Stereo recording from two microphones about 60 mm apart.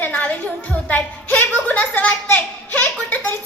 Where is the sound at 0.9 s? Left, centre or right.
Left.